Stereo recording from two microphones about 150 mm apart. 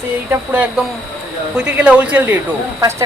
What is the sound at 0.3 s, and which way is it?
Speech, 10° right (ahead or behind).